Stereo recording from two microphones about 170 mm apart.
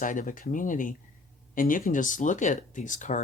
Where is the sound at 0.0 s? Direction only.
50° left (ahead or behind).